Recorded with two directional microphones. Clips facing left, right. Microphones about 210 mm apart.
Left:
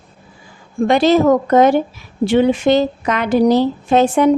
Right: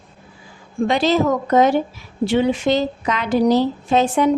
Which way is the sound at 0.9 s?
50° left (ahead or behind).